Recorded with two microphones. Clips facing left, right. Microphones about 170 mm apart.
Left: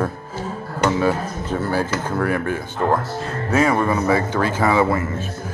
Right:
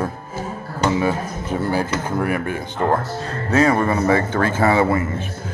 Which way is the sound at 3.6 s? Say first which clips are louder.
Right 1 dB; 35° right (ahead or behind).